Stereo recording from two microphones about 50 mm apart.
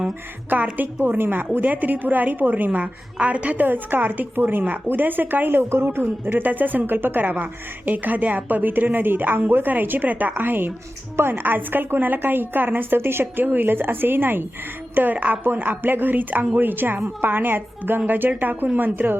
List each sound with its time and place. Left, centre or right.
0.5 s a woman's voice: right
3.7 s a woman's voice: right
5.5 s a woman's voice: right